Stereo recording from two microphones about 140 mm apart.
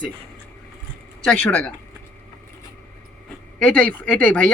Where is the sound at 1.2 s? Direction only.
10° left (ahead or behind).